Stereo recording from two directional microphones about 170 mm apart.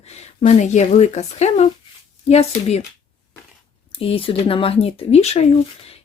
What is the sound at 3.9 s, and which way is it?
Speech, 30° left (ahead or behind).